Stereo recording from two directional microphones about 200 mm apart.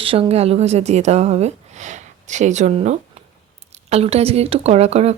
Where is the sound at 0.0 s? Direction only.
30° right (ahead or behind).